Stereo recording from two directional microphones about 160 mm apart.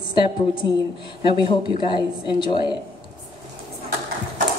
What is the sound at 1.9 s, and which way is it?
Speech, 30° left (ahead or behind).